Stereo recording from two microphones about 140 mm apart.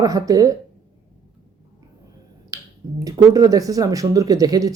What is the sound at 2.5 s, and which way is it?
Finger snapping, 25° right (ahead or behind).